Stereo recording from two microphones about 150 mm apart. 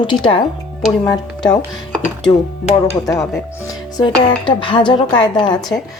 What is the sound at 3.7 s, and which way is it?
Speech, 30° left (ahead or behind).